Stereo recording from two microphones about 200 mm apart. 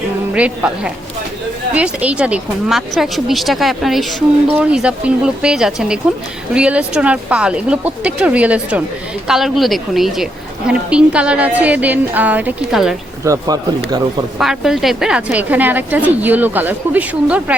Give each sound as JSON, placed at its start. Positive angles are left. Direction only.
{"t": 0.3, "sound": "a woman's voice", "side_deg": -5}
{"t": 13.2, "sound": "a woman's voice", "side_deg": -15}
{"t": 14.3, "sound": "a woman's voice", "side_deg": 0}